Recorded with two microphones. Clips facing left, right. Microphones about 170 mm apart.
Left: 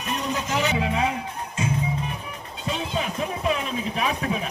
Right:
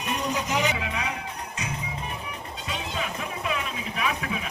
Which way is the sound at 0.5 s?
15° right (ahead or behind).